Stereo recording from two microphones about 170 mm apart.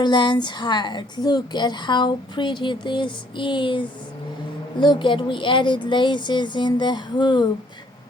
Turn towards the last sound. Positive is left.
turn(degrees=25)  # may be behind; listen again after turning